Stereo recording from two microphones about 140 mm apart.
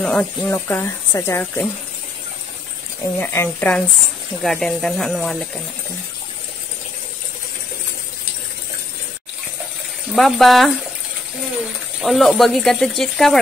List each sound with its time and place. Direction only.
0.0 s speech: 5° left (ahead or behind)
0.5 s speech: 15° left (ahead or behind)
3.2 s speech: 15° left (ahead or behind)
10.1 s speech: centre (ahead or behind)
12.0 s speech: centre (ahead or behind)